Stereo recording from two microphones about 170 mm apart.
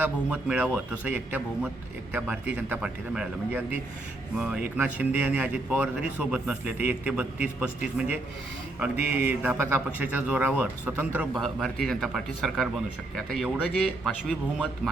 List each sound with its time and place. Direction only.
0.0 s speech: 10° right (ahead or behind)
11.3 s speech: centre (ahead or behind)